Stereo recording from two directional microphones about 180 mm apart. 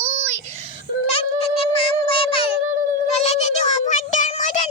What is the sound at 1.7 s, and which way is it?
Child singing, 30° left (ahead or behind).